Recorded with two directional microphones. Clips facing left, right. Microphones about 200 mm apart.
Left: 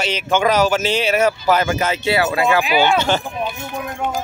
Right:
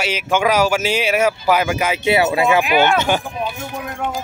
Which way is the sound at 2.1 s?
20° right (ahead or behind).